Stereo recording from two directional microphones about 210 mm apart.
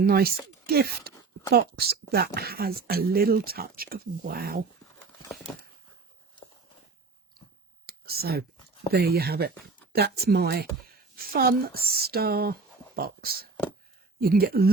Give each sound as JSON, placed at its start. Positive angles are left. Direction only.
{"t": 0.0, "sound": "speech", "side_deg": -45}
{"t": 7.9, "sound": "whispering", "side_deg": -45}
{"t": 8.9, "sound": "speech", "side_deg": -50}